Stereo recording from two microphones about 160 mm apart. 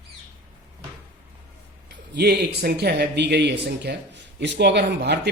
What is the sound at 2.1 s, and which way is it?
Speech, 90° right.